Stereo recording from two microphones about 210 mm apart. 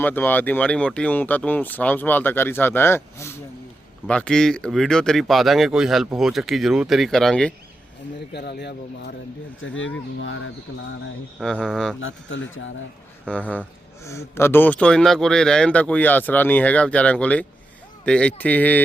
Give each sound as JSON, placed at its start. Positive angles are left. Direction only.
{"t": 0.0, "sound": "speech", "side_deg": 10}
{"t": 8.3, "sound": "speech", "side_deg": 50}
{"t": 9.6, "sound": "speech", "side_deg": 65}
{"t": 11.3, "sound": "speech", "side_deg": 5}
{"t": 11.9, "sound": "speech", "side_deg": 65}
{"t": 13.2, "sound": "speech", "side_deg": 5}